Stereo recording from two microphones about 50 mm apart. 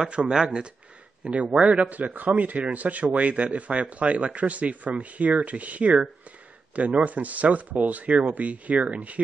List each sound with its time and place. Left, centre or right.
0.3 s a man's voice: centre